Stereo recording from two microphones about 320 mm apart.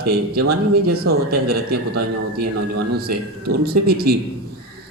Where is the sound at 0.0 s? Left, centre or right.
Right.